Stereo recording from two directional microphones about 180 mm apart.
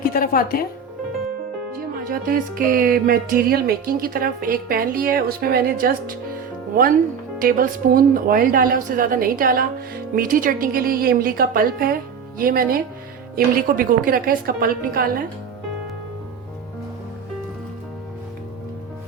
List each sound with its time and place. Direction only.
0.0 s speech: 55° left (ahead or behind)
2.0 s a woman's voice: 50° right (ahead or behind)
7.4 s a woman's voice: 55° right (ahead or behind)